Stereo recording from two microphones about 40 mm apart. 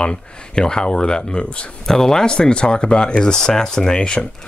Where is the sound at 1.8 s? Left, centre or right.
Centre.